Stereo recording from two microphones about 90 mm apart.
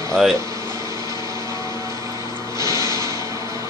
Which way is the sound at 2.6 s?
35° right (ahead or behind).